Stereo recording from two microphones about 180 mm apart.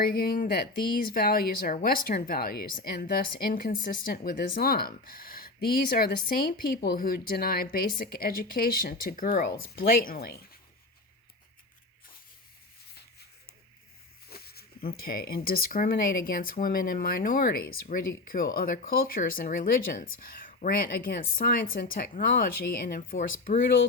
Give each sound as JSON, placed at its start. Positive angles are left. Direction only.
{"t": 0.0, "sound": "speech", "side_deg": 55}
{"t": 14.3, "sound": "speech", "side_deg": 60}